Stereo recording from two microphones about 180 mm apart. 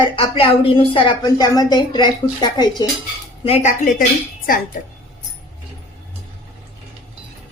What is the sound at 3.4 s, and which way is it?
Speech, 40° left (ahead or behind).